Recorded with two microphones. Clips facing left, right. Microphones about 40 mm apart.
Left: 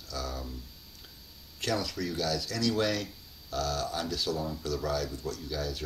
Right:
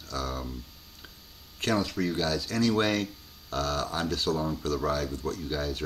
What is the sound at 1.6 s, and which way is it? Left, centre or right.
Speech, right.